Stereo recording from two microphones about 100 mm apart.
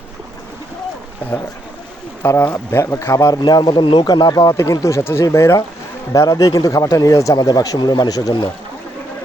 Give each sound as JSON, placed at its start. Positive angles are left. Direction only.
{"t": 2.2, "sound": "speech", "side_deg": 30}